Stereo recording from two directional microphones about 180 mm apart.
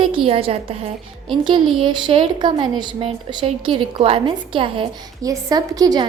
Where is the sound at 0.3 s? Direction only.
35° right (ahead or behind).